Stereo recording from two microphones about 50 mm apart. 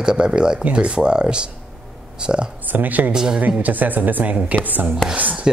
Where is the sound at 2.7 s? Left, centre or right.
Right.